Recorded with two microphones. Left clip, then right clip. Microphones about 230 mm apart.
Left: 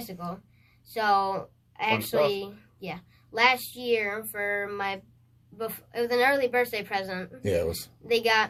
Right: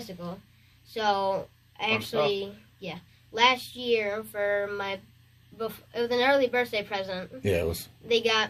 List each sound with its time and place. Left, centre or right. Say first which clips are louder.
0.9 s speech: left 2 dB; centre
7.4 s speech: even; right
8.0 s speech: left 1 dB; centre